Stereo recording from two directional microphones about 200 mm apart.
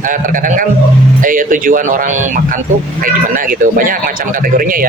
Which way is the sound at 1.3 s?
45° right (ahead or behind).